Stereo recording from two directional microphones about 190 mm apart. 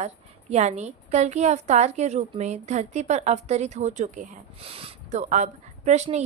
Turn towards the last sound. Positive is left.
turn(degrees=-40)  # may be behind; listen again after turning